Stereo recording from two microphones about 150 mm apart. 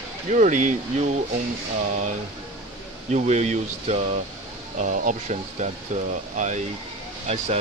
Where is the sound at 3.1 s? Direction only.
50° right (ahead or behind).